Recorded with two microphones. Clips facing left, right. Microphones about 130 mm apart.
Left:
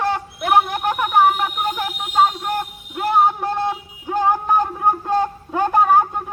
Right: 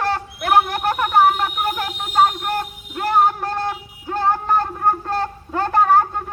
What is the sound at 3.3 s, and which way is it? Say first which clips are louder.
Music: left 2 dB; 20° left (ahead or behind).